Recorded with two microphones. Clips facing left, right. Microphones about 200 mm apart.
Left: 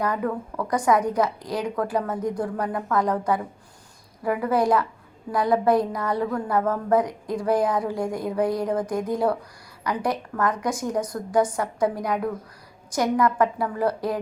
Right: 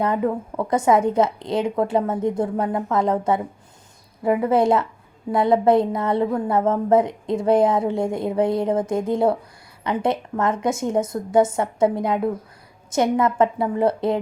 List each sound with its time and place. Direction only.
0.0 s a woman's voice: 25° right (ahead or behind)